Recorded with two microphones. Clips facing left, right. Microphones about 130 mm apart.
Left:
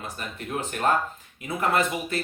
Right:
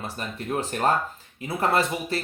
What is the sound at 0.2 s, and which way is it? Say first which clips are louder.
Speech: right 3 dB; 35° right (ahead or behind).